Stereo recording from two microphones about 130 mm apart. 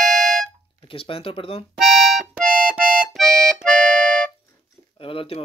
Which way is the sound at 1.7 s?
Centre (ahead or behind).